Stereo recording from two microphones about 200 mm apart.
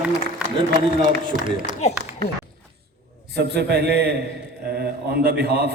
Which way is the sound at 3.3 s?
55° right (ahead or behind).